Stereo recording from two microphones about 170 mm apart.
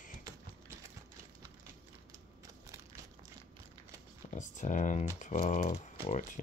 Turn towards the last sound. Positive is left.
turn(degrees=45)  # may be behind; listen again after turning